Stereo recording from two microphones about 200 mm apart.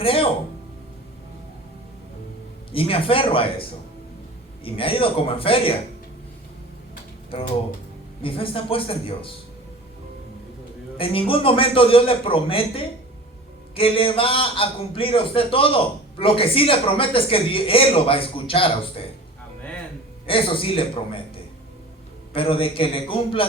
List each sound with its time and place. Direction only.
0.0 s music: 25° left (ahead or behind)
2.7 s a man's voice: 25° left (ahead or behind)
7.3 s a man's voice: 30° left (ahead or behind)
10.9 s a man's voice: 25° left (ahead or behind)
20.2 s a man's voice: 25° left (ahead or behind)
22.3 s a man's voice: 25° left (ahead or behind)